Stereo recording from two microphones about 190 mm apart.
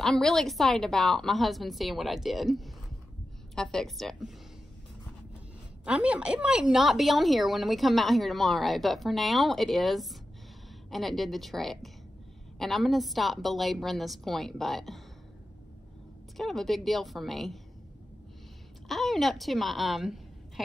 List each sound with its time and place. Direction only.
0.0 s a woman's voice: centre (ahead or behind)
5.9 s a woman's voice: 5° right (ahead or behind)
16.3 s a woman's voice: centre (ahead or behind)
18.9 s a woman's voice: centre (ahead or behind)